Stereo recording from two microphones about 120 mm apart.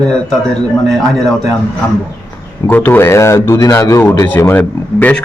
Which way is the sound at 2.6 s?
15° left (ahead or behind).